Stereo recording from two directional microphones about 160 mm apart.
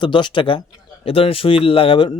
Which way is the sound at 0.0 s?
30° left (ahead or behind).